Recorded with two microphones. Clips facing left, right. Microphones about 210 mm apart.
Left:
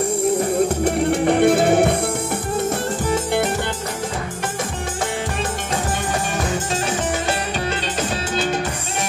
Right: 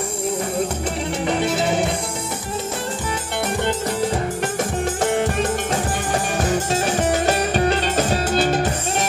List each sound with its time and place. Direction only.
1.2 s music: 55° left (ahead or behind)